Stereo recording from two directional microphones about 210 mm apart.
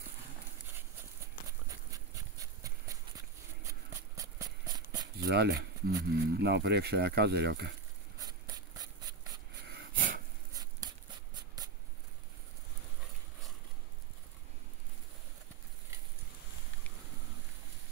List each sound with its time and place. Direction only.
1.9 s horse: 15° right (ahead or behind)
4.2 s a sound: 15° right (ahead or behind)
5.1 s speech: 50° right (ahead or behind)
8.2 s rub: 20° right (ahead or behind)
9.7 s sniff: 45° right (ahead or behind)
10.5 s a sound: 15° right (ahead or behind)